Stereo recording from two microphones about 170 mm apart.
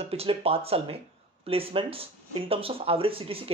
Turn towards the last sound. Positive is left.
turn(degrees=-35)  # may be behind; listen again after turning